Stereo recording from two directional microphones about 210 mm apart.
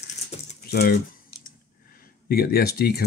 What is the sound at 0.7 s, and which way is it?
Speech, 45° left (ahead or behind).